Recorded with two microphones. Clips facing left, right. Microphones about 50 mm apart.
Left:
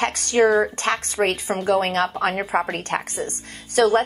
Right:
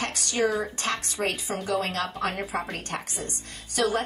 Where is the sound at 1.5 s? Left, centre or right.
Left.